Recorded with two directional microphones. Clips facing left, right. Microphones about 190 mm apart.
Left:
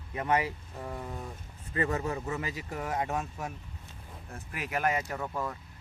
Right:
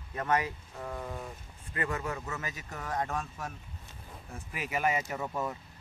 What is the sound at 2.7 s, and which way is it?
Speech, 15° left (ahead or behind).